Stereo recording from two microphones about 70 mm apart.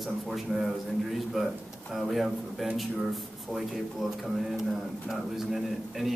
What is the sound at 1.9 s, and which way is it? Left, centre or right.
Speech, centre.